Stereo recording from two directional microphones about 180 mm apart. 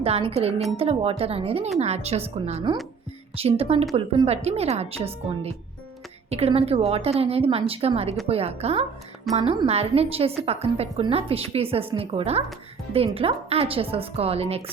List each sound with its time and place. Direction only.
0.0 s a woman's voice: 35° right (ahead or behind)